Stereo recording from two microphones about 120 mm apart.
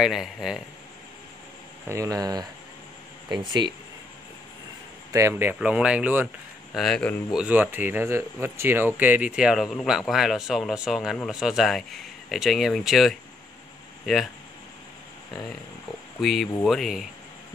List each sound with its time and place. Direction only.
0.0 s speech: 5° right (ahead or behind)
1.9 s speech: 25° right (ahead or behind)
5.3 s speech: 10° right (ahead or behind)
6.7 s speech: 5° left (ahead or behind)
7.3 s speech: 10° right (ahead or behind)
16.2 s speech: centre (ahead or behind)